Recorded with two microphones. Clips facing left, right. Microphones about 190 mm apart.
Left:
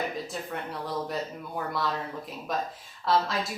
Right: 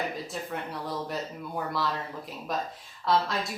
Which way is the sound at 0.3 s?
Centre (ahead or behind).